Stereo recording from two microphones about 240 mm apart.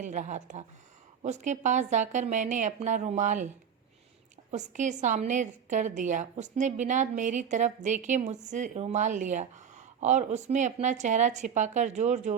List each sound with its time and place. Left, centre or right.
0.0 s speech: right
4.5 s a woman's voice: right